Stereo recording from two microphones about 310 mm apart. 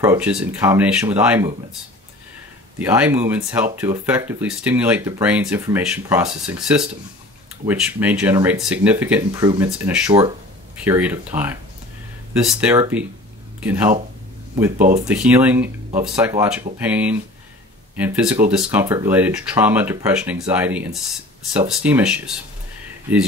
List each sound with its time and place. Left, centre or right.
0.0 s speech: centre
2.8 s speech: centre
15.0 s speech: centre